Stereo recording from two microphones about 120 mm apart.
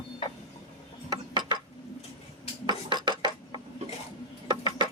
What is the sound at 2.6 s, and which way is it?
Cutlery, 35° right (ahead or behind).